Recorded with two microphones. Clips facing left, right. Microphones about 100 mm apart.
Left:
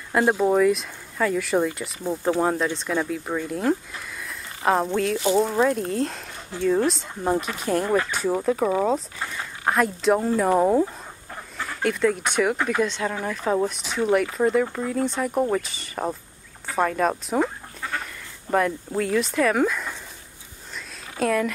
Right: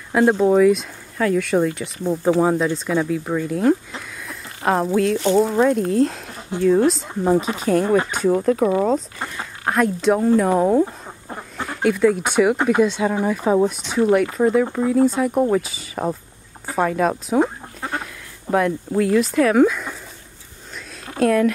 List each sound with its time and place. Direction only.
0.1 s speech: centre (ahead or behind)
17.7 s goat: 30° right (ahead or behind)
18.5 s speech: 5° right (ahead or behind)
21.2 s speech: centre (ahead or behind)